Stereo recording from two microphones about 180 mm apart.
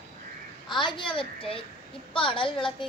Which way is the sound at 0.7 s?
25° left (ahead or behind).